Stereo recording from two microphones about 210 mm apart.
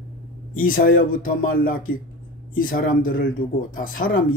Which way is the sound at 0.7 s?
40° left (ahead or behind).